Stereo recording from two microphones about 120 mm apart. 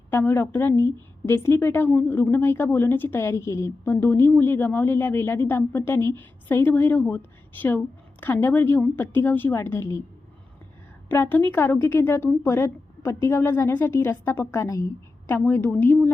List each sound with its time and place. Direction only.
0.1 s a woman's voice: 15° left (ahead or behind)
11.1 s a woman's voice: 15° left (ahead or behind)